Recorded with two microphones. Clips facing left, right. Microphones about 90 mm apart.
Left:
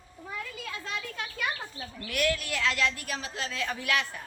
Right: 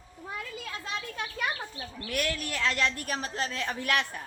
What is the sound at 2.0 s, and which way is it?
A woman's voice, 40° right (ahead or behind).